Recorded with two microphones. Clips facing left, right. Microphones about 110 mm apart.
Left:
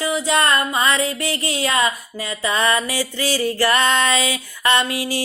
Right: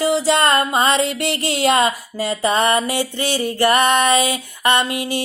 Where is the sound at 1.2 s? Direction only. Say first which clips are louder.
Right 3 dB; 70° right (ahead or behind).